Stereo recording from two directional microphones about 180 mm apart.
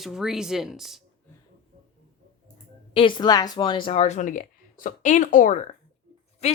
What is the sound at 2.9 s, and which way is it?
Speech, 25° left (ahead or behind).